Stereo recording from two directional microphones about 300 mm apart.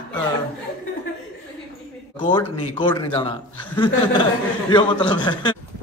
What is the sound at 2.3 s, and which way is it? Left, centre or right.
A man's voice, centre.